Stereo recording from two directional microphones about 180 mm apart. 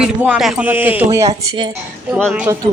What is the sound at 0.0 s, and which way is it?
Speech, 5° right (ahead or behind).